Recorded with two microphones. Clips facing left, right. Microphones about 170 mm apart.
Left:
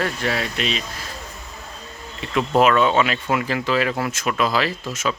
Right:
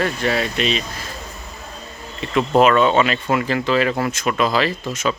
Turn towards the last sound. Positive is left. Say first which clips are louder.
# right 3 dB
turn(degrees=5)  # may be behind; listen again after turning